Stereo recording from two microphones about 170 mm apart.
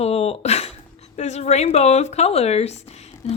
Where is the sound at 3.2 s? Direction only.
40° left (ahead or behind).